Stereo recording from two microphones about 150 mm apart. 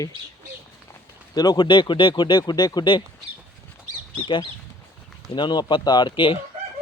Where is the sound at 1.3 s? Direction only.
25° left (ahead or behind).